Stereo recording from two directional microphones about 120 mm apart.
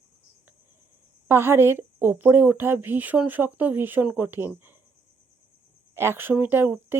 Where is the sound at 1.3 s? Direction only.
20° right (ahead or behind).